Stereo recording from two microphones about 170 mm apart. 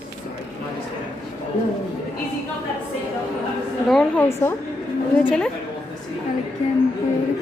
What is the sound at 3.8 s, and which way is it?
Speech, 5° left (ahead or behind).